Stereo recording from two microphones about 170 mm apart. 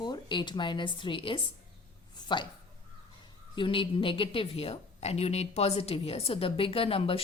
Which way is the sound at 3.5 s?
30° left (ahead or behind).